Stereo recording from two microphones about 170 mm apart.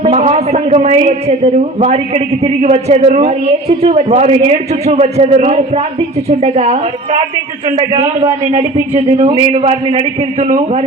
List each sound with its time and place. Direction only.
0.0 s a man's voice: 40° right (ahead or behind)